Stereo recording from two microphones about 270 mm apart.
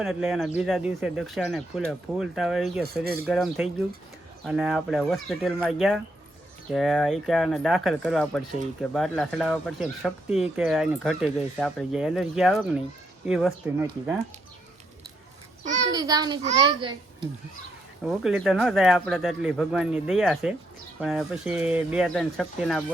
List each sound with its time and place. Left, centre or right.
0.0 s speech: centre
10.2 s speech: left
10.6 s speech: centre
15.6 s a sound: right
15.9 s a child's voice: centre
18.0 s speech: centre